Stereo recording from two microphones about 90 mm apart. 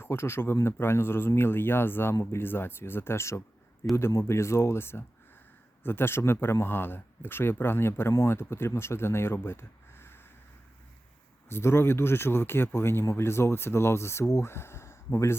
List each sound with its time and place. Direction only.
0.0 s speech: 30° left (ahead or behind)
11.4 s speech: 30° left (ahead or behind)